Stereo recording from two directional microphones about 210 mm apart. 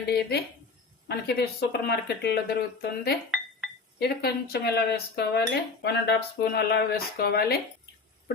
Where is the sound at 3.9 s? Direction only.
50° left (ahead or behind).